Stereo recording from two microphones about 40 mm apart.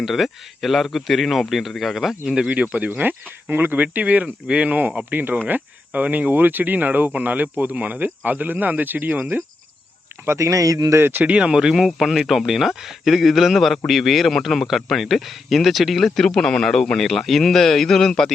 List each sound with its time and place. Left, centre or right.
0.0 s speech: centre
2.5 s speech: right
3.5 s speech: right
5.5 s speech: right
10.9 s speech: right
11.3 s speech: right
11.5 s speech: centre
11.9 s speech: centre